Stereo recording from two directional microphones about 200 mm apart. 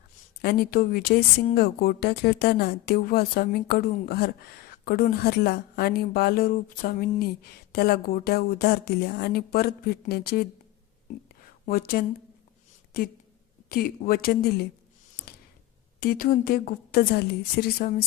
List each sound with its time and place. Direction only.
0.4 s speech: 50° left (ahead or behind)
11.6 s speech: 45° left (ahead or behind)
16.0 s speech: 50° left (ahead or behind)